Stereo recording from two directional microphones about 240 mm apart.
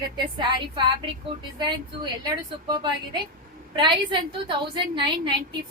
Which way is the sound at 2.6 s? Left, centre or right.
Centre.